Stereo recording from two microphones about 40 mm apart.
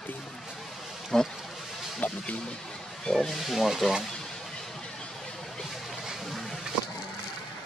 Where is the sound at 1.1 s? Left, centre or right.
Centre.